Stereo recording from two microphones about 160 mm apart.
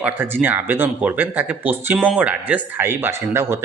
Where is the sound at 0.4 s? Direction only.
10° right (ahead or behind).